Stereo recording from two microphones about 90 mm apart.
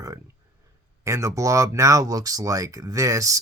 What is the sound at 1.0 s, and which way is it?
Speech, 35° right (ahead or behind).